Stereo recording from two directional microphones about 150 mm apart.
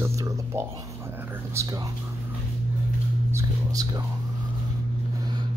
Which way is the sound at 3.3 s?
20° right (ahead or behind).